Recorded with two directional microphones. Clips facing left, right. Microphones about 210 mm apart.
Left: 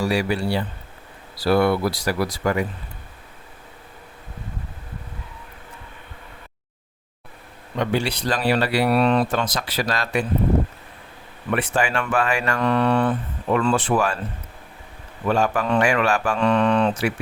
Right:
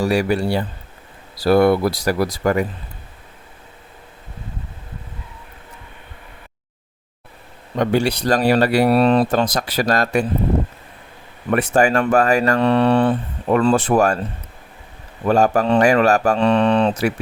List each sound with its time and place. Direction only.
0.0 s speech: 45° right (ahead or behind)
7.8 s speech: 45° right (ahead or behind)
11.5 s speech: 45° right (ahead or behind)
15.3 s speech: 40° right (ahead or behind)